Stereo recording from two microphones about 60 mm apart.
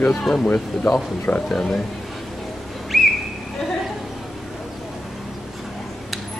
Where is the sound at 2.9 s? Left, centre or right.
Centre.